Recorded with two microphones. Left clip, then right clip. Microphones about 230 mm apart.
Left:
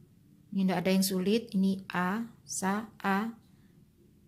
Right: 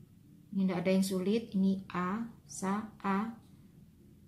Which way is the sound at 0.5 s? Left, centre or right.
Left.